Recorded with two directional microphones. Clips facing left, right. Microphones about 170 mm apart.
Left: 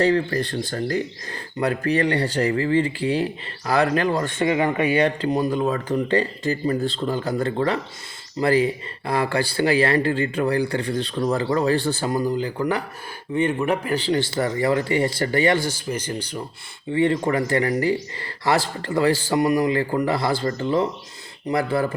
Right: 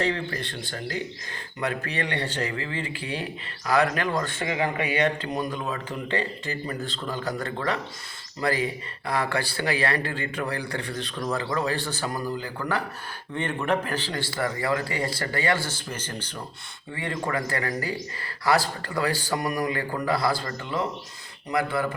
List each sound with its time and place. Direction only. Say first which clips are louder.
0.0 s speech: left 8 dB; 40° left (ahead or behind)
4.5 s speech: left 5 dB; 40° left (ahead or behind); by 16.4 s 10° left (ahead or behind)
16.9 s speech: left 9 dB; 25° left (ahead or behind)